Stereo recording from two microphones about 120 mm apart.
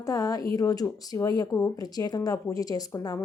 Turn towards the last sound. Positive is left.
turn(degrees=30)  # may be behind; listen again after turning